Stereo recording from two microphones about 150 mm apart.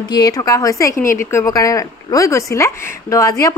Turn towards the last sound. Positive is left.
turn(degrees=25)  # may be behind; listen again after turning